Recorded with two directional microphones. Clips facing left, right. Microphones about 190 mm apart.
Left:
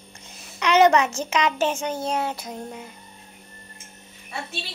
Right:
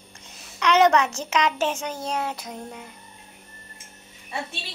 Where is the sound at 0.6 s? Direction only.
5° left (ahead or behind).